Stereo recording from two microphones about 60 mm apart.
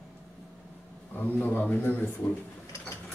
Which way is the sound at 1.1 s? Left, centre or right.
Left.